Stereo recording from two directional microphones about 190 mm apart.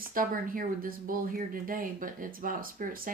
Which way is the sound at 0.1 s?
45° right (ahead or behind).